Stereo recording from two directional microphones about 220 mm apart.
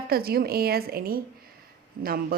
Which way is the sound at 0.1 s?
45° right (ahead or behind).